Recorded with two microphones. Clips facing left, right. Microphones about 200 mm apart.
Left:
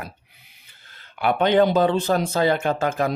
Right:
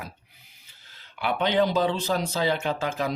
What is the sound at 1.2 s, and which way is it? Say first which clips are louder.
Speech: left 6 dB; 50° left (ahead or behind).